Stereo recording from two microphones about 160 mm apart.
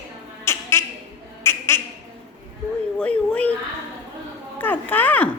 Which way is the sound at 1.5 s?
15° left (ahead or behind).